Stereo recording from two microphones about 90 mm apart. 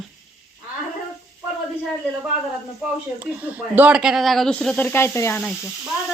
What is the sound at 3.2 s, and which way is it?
Speech, 20° right (ahead or behind).